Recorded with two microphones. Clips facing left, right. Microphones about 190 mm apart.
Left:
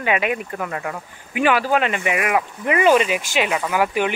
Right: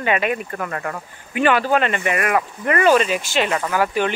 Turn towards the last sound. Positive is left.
turn(degrees=15)  # may be behind; listen again after turning